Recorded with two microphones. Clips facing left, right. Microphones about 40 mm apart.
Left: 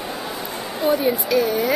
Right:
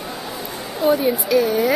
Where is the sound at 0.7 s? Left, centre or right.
Centre.